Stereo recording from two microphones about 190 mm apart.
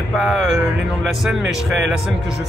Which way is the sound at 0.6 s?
Centre (ahead or behind).